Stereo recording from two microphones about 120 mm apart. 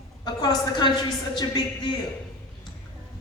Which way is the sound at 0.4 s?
35° left (ahead or behind).